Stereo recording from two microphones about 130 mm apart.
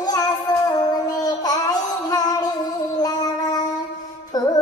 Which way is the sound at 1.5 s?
30° left (ahead or behind).